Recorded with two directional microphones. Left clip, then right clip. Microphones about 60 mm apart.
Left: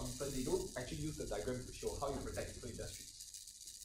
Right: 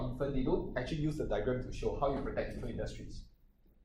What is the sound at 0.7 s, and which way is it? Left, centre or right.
Speech, right.